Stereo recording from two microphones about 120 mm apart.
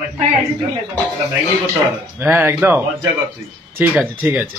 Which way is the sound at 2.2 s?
10° right (ahead or behind).